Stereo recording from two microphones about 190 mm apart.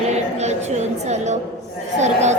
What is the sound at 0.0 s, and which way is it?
Music, 35° right (ahead or behind).